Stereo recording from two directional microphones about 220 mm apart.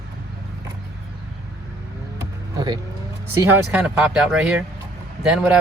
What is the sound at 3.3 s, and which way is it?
Speech, 10° right (ahead or behind).